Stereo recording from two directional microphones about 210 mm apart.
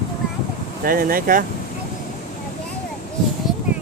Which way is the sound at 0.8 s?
45° right (ahead or behind).